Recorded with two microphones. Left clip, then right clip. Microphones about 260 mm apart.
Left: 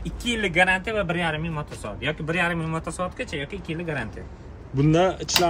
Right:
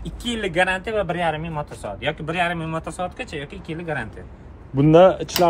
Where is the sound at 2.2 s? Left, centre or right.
Right.